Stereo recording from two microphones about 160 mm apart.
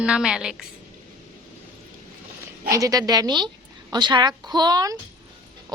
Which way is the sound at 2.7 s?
20° right (ahead or behind).